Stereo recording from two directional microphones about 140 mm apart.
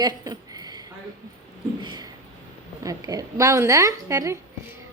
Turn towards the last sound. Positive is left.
turn(degrees=-20)  # may be behind; listen again after turning